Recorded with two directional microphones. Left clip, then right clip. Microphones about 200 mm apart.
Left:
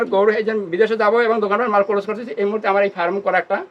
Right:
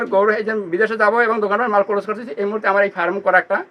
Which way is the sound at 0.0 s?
5° left (ahead or behind).